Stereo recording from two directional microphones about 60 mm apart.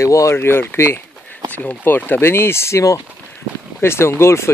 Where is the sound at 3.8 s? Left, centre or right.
Left.